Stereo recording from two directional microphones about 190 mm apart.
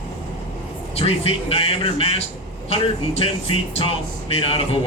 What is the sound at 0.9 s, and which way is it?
Speech, 30° left (ahead or behind).